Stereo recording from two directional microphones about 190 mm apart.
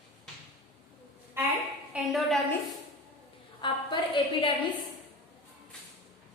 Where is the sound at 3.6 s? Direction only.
25° left (ahead or behind).